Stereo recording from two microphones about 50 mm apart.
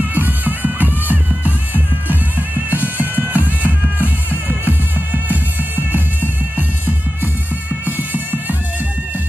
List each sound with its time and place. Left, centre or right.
0.1 s music: right
7.8 s music: right